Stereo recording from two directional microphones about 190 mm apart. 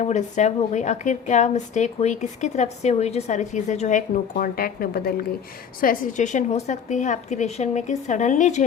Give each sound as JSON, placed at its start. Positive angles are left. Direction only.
{"t": 0.0, "sound": "a woman's voice", "side_deg": 35}